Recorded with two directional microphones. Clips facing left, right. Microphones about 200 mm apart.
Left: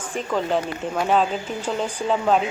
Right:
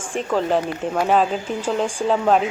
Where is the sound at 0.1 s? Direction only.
5° right (ahead or behind).